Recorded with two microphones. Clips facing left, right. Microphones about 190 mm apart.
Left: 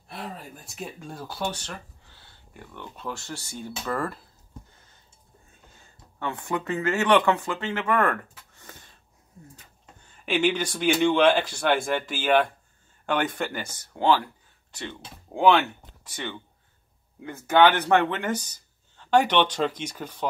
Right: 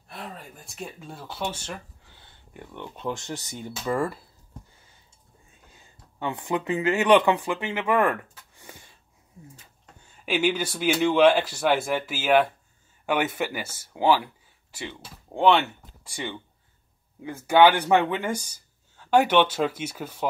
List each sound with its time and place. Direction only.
0.4 s speech: centre (ahead or behind)
2.7 s speech: 20° right (ahead or behind)
5.7 s speech: 15° right (ahead or behind)
10.2 s speech: 5° right (ahead or behind)
16.0 s speech: 10° right (ahead or behind)